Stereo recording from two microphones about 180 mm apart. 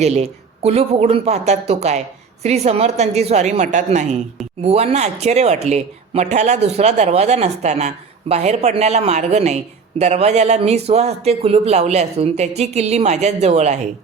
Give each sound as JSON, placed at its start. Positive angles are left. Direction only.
{"t": 0.0, "sound": "a woman's voice", "side_deg": -35}